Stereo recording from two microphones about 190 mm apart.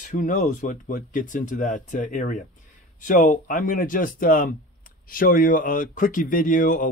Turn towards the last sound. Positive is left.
turn(degrees=45)  # may be behind; listen again after turning